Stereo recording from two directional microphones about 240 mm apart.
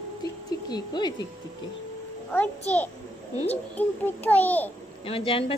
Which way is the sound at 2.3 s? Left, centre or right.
Centre.